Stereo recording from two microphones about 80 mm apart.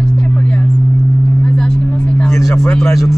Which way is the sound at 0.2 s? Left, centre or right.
Centre.